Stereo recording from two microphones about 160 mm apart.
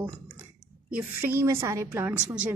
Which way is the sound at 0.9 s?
15° right (ahead or behind).